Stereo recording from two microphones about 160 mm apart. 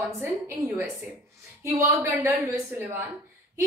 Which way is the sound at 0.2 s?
15° right (ahead or behind).